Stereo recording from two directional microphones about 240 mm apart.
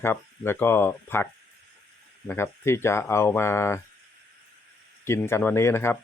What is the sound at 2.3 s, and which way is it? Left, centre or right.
Speech, centre.